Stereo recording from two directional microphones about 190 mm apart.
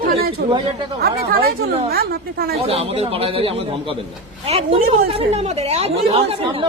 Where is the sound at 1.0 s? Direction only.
55° right (ahead or behind).